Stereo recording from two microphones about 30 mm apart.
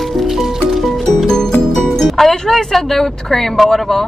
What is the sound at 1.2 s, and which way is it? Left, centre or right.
Music, centre.